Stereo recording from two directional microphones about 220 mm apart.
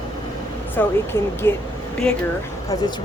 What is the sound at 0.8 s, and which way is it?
Speech, 10° left (ahead or behind).